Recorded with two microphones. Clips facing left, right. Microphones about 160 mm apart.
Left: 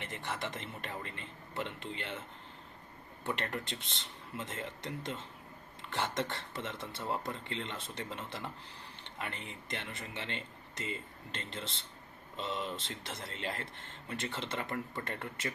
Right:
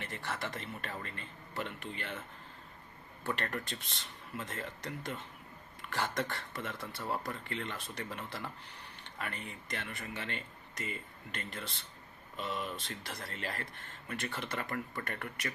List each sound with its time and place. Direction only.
0.0 s speech: 20° left (ahead or behind)
3.2 s speech: 20° left (ahead or behind)